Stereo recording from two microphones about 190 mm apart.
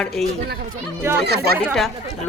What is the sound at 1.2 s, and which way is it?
Speech, 60° right (ahead or behind).